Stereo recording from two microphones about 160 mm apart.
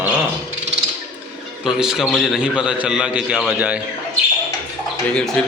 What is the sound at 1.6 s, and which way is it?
A man's voice, 5° right (ahead or behind).